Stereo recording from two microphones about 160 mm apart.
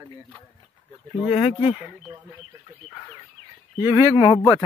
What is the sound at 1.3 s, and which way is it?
Speech, 40° left (ahead or behind).